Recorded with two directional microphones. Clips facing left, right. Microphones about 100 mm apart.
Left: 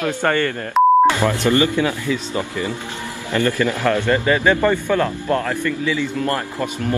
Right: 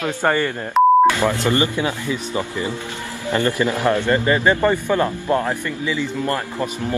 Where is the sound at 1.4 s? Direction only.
20° right (ahead or behind).